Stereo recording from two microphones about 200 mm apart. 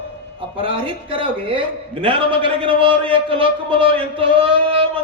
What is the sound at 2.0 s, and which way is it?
A man's voice, 25° right (ahead or behind).